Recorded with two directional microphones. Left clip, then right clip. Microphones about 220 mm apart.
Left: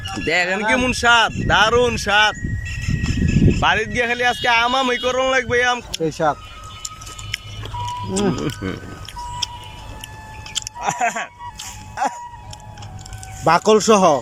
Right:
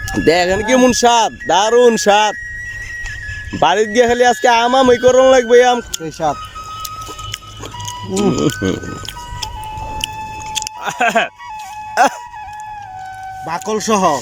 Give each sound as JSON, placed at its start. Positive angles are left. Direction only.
{"t": 0.3, "sound": "speech", "side_deg": -25}
{"t": 3.6, "sound": "speech", "side_deg": -30}
{"t": 6.0, "sound": "speech", "side_deg": -10}
{"t": 8.1, "sound": "speech", "side_deg": -15}
{"t": 8.4, "sound": "speech", "side_deg": -25}
{"t": 10.6, "sound": "keys jangling", "side_deg": -40}
{"t": 13.4, "sound": "speech", "side_deg": 0}